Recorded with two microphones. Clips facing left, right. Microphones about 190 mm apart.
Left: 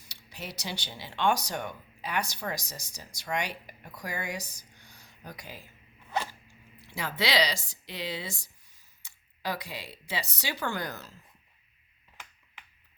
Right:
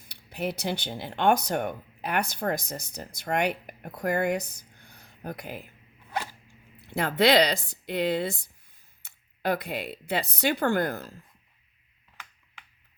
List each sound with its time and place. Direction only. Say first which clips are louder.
0.0 s speech: right 11 dB; 55° right (ahead or behind)
6.7 s speech: right 8 dB; 55° right (ahead or behind)